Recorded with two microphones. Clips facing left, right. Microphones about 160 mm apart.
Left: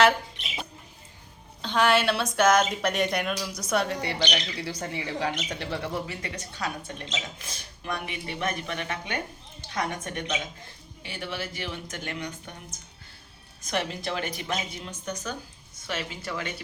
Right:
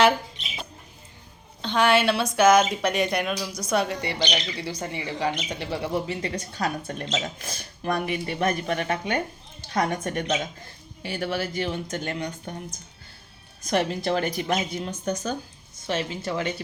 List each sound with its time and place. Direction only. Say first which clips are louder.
1.6 s speech: right 2 dB; centre (ahead or behind)
6.1 s speech: right 7 dB; 30° right (ahead or behind)
13.7 s speech: right 6 dB; 40° right (ahead or behind)